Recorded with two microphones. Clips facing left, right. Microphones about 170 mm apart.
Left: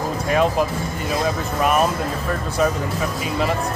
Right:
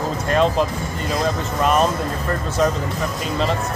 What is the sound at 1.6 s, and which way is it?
Speech, 10° left (ahead or behind).